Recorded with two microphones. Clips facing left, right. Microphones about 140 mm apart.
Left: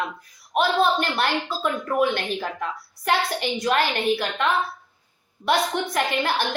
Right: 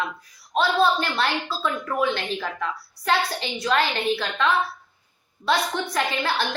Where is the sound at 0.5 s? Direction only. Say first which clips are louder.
Even; 15° left (ahead or behind).